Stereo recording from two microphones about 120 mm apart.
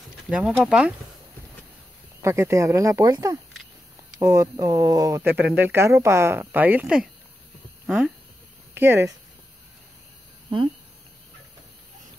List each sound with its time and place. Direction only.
0.3 s speech: 10° right (ahead or behind)
2.2 s speech: 25° right (ahead or behind)
5.3 s speech: 15° right (ahead or behind)
7.8 s a sound: centre (ahead or behind)
8.7 s speech: 20° right (ahead or behind)